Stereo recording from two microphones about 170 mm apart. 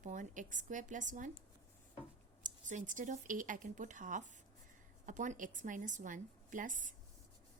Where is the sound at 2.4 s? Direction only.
50° right (ahead or behind).